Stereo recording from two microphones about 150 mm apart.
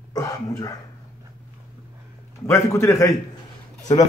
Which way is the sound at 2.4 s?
20° left (ahead or behind).